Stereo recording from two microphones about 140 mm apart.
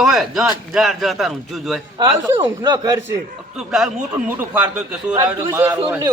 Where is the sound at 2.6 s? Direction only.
25° right (ahead or behind).